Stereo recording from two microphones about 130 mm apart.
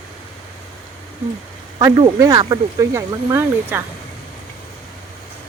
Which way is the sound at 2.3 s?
40° right (ahead or behind).